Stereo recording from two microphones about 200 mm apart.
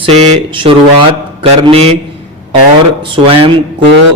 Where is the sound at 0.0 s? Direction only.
30° right (ahead or behind).